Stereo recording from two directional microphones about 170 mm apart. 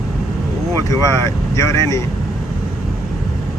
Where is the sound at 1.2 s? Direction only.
15° left (ahead or behind).